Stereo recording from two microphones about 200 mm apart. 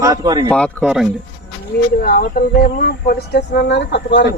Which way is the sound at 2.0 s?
50° left (ahead or behind).